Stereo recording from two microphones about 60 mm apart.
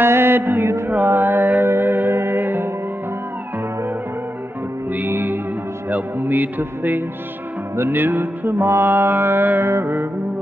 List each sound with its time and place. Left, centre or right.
0.0 s a sound: right
0.8 s music: right
4.9 s music: right